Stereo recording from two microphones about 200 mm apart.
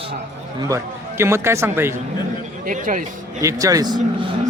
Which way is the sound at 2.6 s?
40° right (ahead or behind).